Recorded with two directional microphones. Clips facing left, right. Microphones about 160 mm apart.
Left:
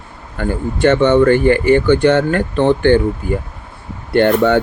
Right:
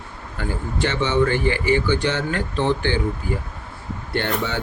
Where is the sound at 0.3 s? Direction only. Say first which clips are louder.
Left 7 dB; 55° left (ahead or behind).